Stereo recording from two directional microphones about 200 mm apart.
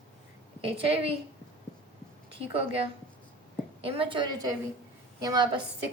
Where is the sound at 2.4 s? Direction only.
30° right (ahead or behind).